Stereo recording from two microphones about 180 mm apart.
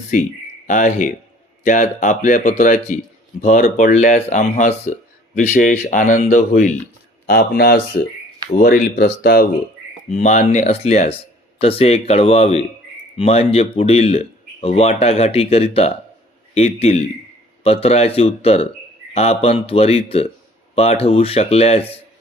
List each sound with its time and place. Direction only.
0.1 s speech: 45° left (ahead or behind)
7.3 s speech: 65° left (ahead or behind)
10.1 s speech: 40° left (ahead or behind)